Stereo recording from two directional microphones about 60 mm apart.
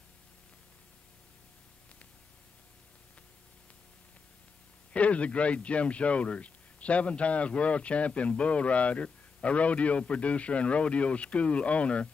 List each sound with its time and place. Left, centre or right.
4.9 s speech: left